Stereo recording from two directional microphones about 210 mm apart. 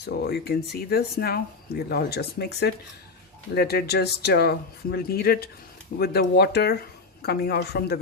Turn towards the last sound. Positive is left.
turn(degrees=50)  # may be behind; listen again after turning